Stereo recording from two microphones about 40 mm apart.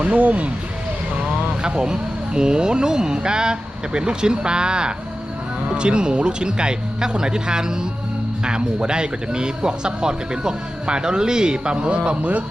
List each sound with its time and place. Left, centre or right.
0.0 s speech: right
1.6 s speech: right